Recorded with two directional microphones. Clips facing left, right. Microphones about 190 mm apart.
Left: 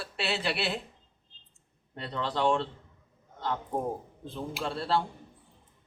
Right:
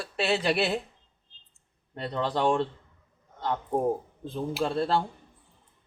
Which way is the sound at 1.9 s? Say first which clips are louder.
Right 4 dB; 45° right (ahead or behind).